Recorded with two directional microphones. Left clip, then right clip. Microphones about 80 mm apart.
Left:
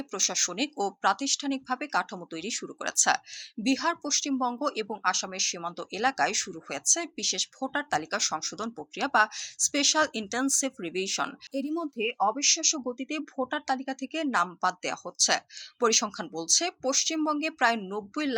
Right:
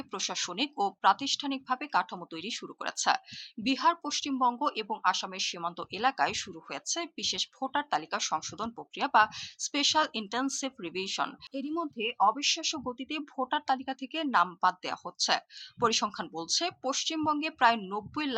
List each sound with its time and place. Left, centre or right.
0.1 s speech: left
17.7 s speech: centre